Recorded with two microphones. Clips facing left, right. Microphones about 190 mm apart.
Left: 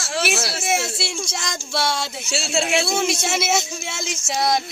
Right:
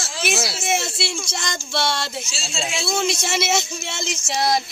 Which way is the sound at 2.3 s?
65° left (ahead or behind).